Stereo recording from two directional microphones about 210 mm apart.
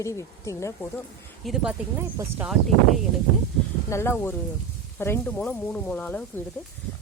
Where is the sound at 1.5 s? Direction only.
5° right (ahead or behind).